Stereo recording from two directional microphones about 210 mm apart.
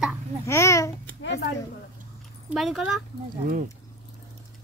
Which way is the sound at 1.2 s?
50° left (ahead or behind).